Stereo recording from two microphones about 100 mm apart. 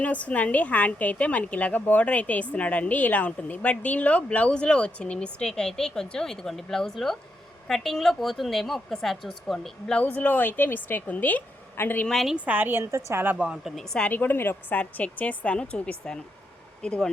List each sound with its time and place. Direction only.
0.0 s a woman's voice: 15° left (ahead or behind)
12.0 s speech: centre (ahead or behind)
12.5 s a woman's voice: 20° right (ahead or behind)
13.3 s speech: 5° right (ahead or behind)
13.9 s a woman's voice: 15° left (ahead or behind)